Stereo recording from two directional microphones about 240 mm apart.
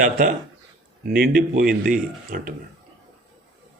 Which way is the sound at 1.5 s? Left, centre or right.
Right.